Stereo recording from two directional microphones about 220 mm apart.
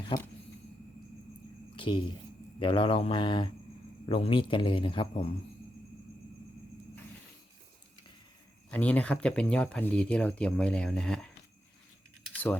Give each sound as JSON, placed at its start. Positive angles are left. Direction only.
{"t": 0.1, "sound": "a man's voice", "side_deg": 25}
{"t": 1.7, "sound": "a sound", "side_deg": 20}
{"t": 2.6, "sound": "a man's voice", "side_deg": 25}
{"t": 8.7, "sound": "speech", "side_deg": 5}